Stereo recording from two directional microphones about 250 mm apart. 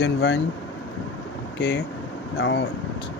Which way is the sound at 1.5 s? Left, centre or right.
Left.